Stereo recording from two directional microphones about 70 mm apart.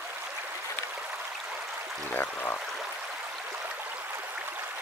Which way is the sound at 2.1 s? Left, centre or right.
Left.